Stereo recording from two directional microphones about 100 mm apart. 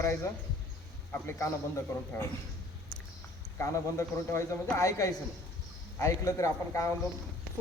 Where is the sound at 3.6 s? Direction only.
30° left (ahead or behind).